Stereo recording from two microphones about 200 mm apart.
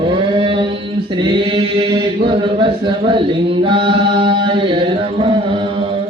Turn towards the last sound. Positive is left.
turn(degrees=-25)  # may be behind; listen again after turning